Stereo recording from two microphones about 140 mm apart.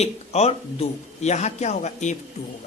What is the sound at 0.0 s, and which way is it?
A man's voice, 50° left (ahead or behind).